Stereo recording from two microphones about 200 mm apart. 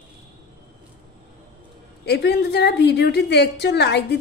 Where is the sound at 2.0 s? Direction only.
55° left (ahead or behind).